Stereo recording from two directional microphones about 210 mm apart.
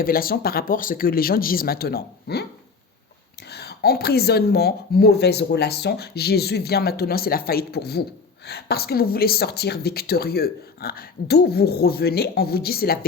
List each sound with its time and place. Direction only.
0.0 s a woman's voice: 45° left (ahead or behind)
3.5 s a woman's voice: 50° left (ahead or behind)